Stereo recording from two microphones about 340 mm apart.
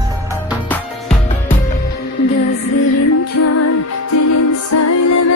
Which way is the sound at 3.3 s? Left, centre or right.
Left.